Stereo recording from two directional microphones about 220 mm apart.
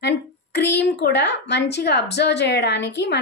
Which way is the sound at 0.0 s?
50° left (ahead or behind).